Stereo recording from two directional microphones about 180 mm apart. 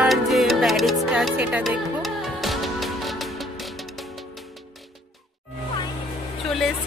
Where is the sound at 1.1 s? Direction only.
5° right (ahead or behind).